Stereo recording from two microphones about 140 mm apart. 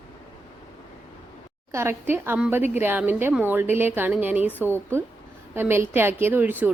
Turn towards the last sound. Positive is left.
turn(degrees=-15)  # may be behind; listen again after turning